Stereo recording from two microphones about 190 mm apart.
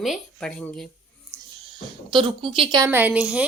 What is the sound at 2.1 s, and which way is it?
Speech, 25° right (ahead or behind).